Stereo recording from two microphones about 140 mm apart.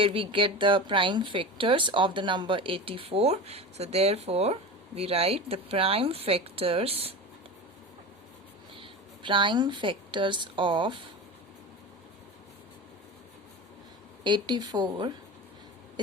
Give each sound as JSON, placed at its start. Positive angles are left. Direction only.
{"t": 0.0, "sound": "speech", "side_deg": -40}
{"t": 8.7, "sound": "a woman's voice", "side_deg": -35}
{"t": 14.3, "sound": "speech", "side_deg": -30}